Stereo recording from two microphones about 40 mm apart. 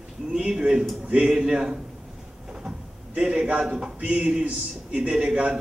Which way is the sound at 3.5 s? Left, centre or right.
Right.